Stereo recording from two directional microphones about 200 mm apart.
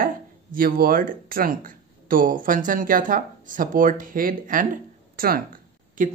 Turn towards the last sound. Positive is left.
turn(degrees=-40)  # may be behind; listen again after turning